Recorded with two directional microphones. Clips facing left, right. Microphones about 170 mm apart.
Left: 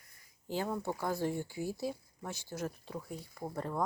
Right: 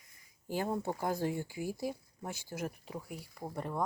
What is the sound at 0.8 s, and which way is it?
Speech, 15° right (ahead or behind).